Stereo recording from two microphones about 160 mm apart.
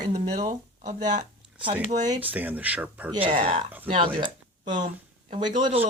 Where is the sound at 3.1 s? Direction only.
35° right (ahead or behind).